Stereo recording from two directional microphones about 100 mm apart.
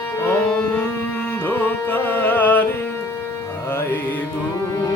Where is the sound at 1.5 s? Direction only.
20° left (ahead or behind).